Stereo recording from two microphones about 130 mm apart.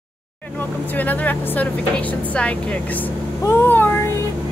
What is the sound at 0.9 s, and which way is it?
Speech, 10° left (ahead or behind).